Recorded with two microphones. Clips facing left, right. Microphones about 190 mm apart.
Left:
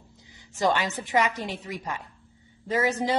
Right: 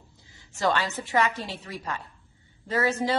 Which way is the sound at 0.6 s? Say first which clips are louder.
Left 1 dB; 20° left (ahead or behind).